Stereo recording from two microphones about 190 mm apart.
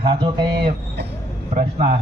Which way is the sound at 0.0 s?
25° right (ahead or behind).